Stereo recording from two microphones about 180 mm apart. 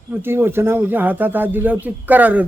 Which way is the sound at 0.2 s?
10° right (ahead or behind).